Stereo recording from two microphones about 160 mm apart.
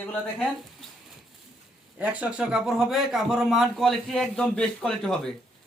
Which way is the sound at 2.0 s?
10° right (ahead or behind).